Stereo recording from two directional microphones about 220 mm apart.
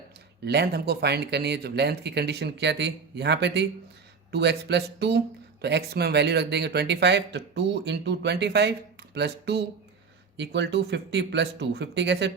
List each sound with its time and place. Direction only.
0.4 s speech: 50° right (ahead or behind)